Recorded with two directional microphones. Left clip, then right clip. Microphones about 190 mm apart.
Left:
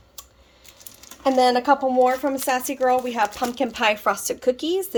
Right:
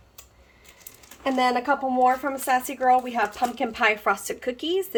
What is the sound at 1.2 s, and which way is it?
Speech, 40° left (ahead or behind).